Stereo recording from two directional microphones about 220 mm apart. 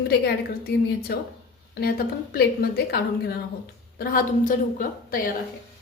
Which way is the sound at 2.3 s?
45° left (ahead or behind).